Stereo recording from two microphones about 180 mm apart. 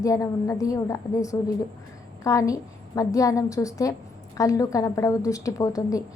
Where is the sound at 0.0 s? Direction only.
20° left (ahead or behind).